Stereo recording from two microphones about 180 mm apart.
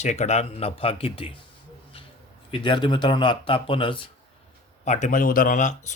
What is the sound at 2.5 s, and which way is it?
Speech, 25° left (ahead or behind).